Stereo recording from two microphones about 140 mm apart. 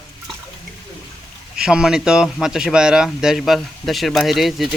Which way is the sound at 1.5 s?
5° right (ahead or behind).